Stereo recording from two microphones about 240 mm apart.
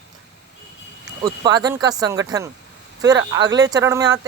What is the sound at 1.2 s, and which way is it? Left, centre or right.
Speech, centre.